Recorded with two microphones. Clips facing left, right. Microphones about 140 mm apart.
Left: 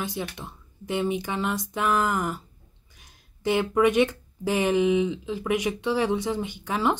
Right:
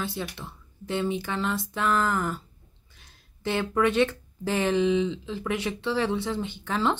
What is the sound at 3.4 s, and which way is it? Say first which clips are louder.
A woman's voice: left 3 dB; 15° left (ahead or behind).